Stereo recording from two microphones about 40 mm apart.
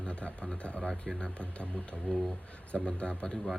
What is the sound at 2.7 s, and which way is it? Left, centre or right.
Speech, left.